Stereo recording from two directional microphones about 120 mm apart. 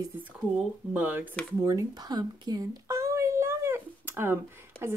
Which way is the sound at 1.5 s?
30° right (ahead or behind).